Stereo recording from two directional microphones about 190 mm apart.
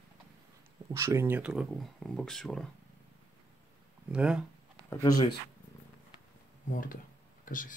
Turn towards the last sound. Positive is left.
turn(degrees=45)  # may be behind; listen again after turning